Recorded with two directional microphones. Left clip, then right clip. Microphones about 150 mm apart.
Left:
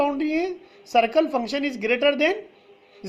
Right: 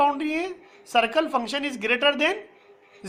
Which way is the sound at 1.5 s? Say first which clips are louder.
Left 2 dB; 40° left (ahead or behind).